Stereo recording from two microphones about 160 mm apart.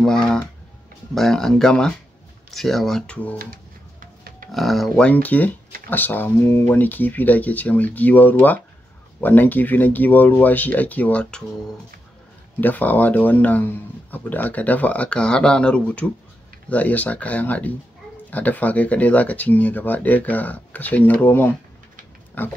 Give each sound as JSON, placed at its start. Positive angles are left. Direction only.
{"t": 1.1, "sound": "speech", "side_deg": 0}
{"t": 4.0, "sound": "pig", "side_deg": -60}
{"t": 4.5, "sound": "speech", "side_deg": 0}
{"t": 12.5, "sound": "speech", "side_deg": 10}